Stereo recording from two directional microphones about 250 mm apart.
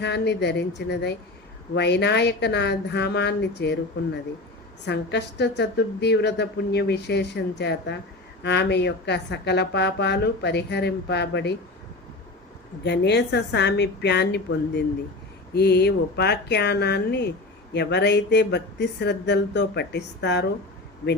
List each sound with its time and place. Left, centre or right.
0.0 s a woman's voice: left
12.8 s a woman's voice: left